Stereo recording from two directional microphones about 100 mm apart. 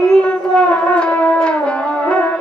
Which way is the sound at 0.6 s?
10° left (ahead or behind).